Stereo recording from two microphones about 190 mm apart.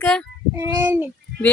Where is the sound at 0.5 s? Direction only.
15° right (ahead or behind).